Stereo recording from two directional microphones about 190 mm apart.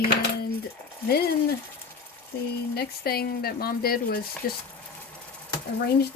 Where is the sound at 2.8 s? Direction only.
55° left (ahead or behind).